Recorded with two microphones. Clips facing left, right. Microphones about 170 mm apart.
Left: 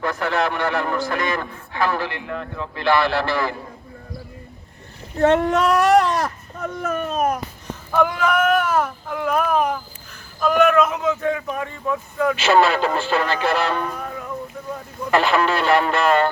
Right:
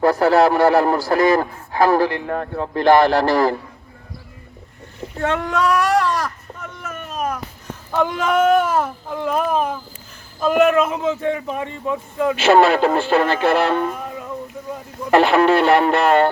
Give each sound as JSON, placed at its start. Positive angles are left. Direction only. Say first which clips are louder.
{"t": 0.0, "sound": "a man's voice", "louder": "right 8 dB", "side_deg": -35}
{"t": 5.4, "sound": "baby cry", "louder": "left 1 dB", "side_deg": 25}
{"t": 7.9, "sound": "speech", "louder": "right 1 dB", "side_deg": -20}
{"t": 12.4, "sound": "speech", "louder": "right 4 dB", "side_deg": -55}
{"t": 13.7, "sound": "music", "louder": "right 4 dB", "side_deg": -25}
{"t": 15.1, "sound": "speech", "louder": "right 5 dB", "side_deg": -60}